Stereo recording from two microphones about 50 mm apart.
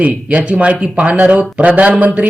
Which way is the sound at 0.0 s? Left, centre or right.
Right.